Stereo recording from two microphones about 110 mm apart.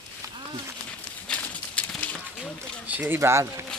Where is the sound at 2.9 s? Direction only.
15° right (ahead or behind).